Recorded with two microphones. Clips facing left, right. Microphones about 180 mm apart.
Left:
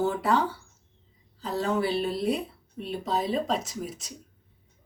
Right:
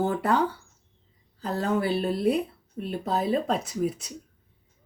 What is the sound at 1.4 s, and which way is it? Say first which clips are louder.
A woman's voice: right 1 dB; 55° right (ahead or behind).